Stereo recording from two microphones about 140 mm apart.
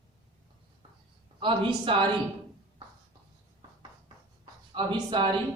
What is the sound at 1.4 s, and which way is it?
Speech, 40° right (ahead or behind).